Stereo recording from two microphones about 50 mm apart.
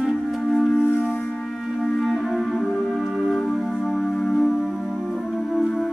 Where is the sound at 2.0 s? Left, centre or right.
Centre.